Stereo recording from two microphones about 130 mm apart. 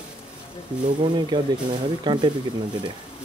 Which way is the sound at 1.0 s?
35° right (ahead or behind).